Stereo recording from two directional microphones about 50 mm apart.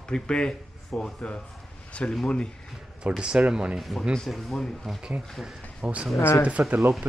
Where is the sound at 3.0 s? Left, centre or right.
Centre.